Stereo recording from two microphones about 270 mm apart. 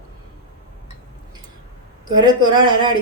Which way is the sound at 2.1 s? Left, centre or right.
Centre.